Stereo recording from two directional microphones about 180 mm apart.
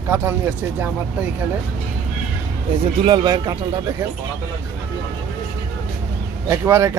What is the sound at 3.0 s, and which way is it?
A man's voice, 25° right (ahead or behind).